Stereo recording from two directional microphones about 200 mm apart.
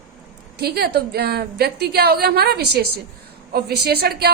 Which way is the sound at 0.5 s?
55° right (ahead or behind).